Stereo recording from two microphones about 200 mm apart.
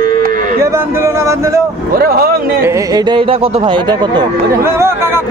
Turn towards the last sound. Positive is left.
turn(degrees=-10)  # may be behind; listen again after turning